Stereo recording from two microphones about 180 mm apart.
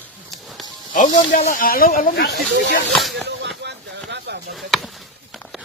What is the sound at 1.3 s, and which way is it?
Speech, 50° left (ahead or behind).